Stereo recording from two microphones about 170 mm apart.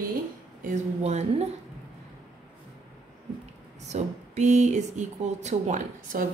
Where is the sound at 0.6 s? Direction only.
45° right (ahead or behind).